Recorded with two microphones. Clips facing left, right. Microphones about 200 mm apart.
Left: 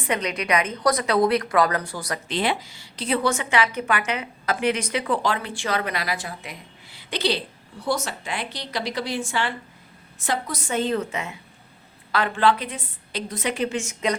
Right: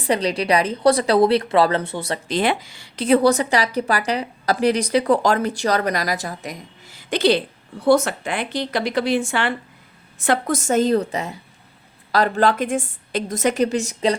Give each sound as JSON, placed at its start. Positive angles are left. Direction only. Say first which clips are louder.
{"t": 0.0, "sound": "a woman's voice", "louder": "right 6 dB", "side_deg": -35}
{"t": 2.3, "sound": "a woman's voice", "louder": "right 4 dB", "side_deg": -50}
{"t": 3.2, "sound": "a woman's voice", "louder": "right 2 dB", "side_deg": -35}